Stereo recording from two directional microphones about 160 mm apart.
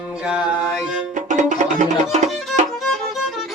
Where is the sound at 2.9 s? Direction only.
Centre (ahead or behind).